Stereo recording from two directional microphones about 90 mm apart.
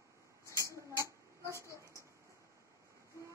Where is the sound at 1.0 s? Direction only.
35° right (ahead or behind).